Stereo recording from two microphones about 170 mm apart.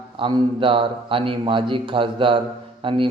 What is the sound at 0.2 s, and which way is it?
A man's voice, 30° right (ahead or behind).